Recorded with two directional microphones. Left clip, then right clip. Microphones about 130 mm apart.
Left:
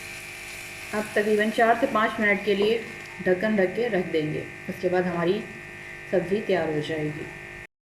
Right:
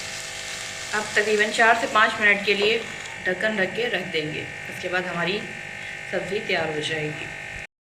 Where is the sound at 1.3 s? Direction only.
45° left (ahead or behind).